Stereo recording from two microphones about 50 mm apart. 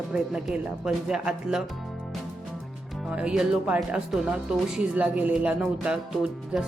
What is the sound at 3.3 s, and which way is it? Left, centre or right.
Speech, centre.